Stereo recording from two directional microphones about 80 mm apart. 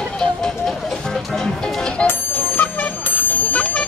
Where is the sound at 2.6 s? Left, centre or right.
Centre.